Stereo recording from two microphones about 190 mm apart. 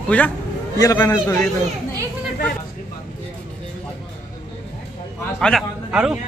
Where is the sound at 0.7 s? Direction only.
20° left (ahead or behind).